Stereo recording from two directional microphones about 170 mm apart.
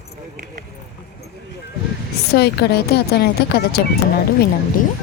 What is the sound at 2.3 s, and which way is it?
Speech, 70° left (ahead or behind).